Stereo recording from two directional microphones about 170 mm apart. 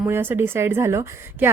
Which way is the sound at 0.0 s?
10° right (ahead or behind).